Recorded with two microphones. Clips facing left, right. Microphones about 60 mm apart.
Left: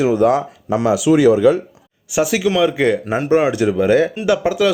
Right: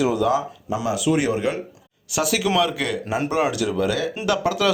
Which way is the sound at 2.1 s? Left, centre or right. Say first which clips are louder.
Left 6 dB; centre.